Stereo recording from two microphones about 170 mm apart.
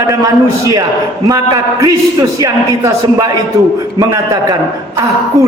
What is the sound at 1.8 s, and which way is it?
A man's voice, 20° right (ahead or behind).